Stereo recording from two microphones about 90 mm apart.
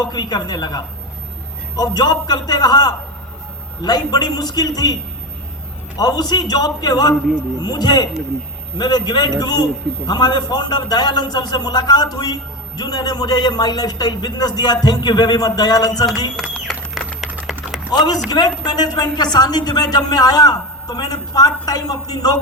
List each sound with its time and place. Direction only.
0.0 s a man's voice: 50° left (ahead or behind)
6.0 s a man's voice: 45° left (ahead or behind)
16.6 s a sound: 5° right (ahead or behind)
17.9 s a man's voice: 50° left (ahead or behind)